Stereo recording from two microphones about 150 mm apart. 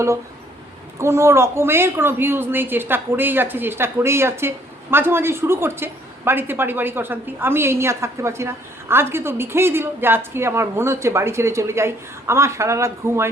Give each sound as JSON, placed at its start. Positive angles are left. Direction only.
{"t": 0.9, "sound": "a woman's voice", "side_deg": -20}